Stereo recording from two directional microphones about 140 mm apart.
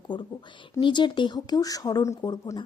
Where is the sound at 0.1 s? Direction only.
30° left (ahead or behind).